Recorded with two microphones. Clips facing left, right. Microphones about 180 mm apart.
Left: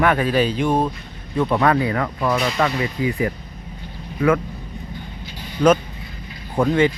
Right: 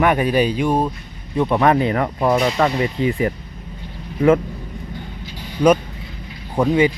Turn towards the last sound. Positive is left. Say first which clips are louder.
# right 1 dB
turn(degrees=-10)  # may be behind; listen again after turning